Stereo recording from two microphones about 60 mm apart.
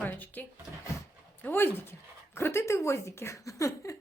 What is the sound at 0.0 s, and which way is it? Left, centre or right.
Drawer open or close, left.